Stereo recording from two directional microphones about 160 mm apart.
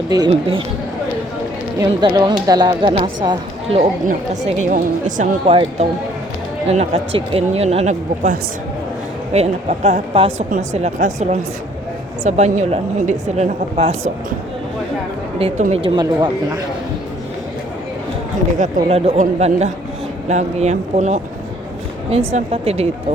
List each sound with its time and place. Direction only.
0.1 s speech: 25° right (ahead or behind)
1.8 s speech: 25° right (ahead or behind)
3.8 s a woman's voice: 55° right (ahead or behind)
5.5 s a woman's voice: 35° right (ahead or behind)
15.4 s speech: 35° right (ahead or behind)
18.5 s a woman's voice: 45° right (ahead or behind)
22.3 s speech: 40° right (ahead or behind)